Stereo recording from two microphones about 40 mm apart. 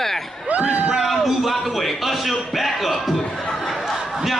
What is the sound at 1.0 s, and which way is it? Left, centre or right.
Speech, centre.